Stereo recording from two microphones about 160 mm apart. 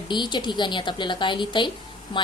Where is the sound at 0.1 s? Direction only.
30° left (ahead or behind).